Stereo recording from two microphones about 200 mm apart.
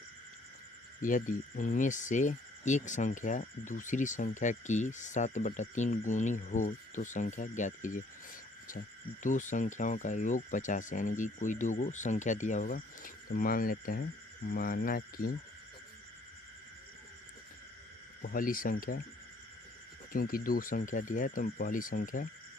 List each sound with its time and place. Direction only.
1.0 s speech: 40° left (ahead or behind)
9.2 s speech: 40° left (ahead or behind)
18.2 s speech: 45° left (ahead or behind)
20.1 s speech: 45° left (ahead or behind)